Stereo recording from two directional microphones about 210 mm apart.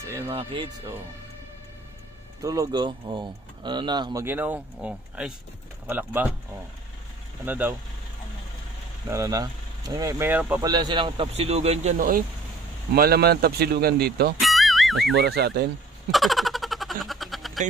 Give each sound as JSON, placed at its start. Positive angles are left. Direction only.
{"t": 0.0, "sound": "music", "side_deg": -10}
{"t": 0.3, "sound": "speech", "side_deg": -25}
{"t": 2.4, "sound": "speech", "side_deg": -15}
{"t": 9.1, "sound": "speech", "side_deg": -15}
{"t": 10.7, "sound": "speech", "side_deg": -20}
{"t": 14.4, "sound": "music", "side_deg": 0}
{"t": 15.1, "sound": "speech", "side_deg": -50}
{"t": 16.1, "sound": "a sound", "side_deg": 0}